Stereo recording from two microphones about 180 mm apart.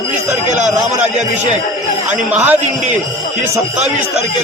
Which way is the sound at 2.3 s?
10° right (ahead or behind).